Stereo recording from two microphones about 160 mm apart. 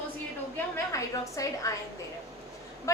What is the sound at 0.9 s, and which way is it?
Speech, 20° left (ahead or behind).